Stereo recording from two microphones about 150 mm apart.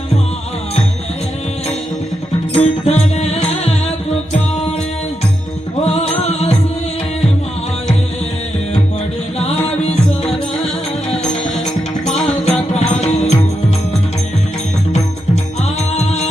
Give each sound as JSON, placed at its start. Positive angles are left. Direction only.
{"t": 2.5, "sound": "music", "side_deg": 45}
{"t": 5.8, "sound": "music", "side_deg": 45}
{"t": 9.4, "sound": "music", "side_deg": 45}
{"t": 12.0, "sound": "music", "side_deg": 45}
{"t": 15.9, "sound": "music", "side_deg": 50}